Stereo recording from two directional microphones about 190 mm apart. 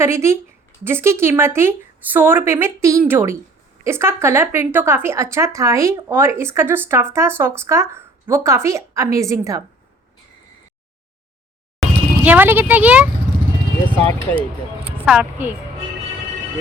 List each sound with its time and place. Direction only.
0.0 s speech: 15° right (ahead or behind)
11.8 s speech: 10° right (ahead or behind)
13.8 s speech: 10° left (ahead or behind)
14.8 s speech: 5° right (ahead or behind)